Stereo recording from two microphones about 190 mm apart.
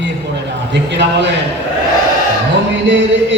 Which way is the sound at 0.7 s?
65° right (ahead or behind).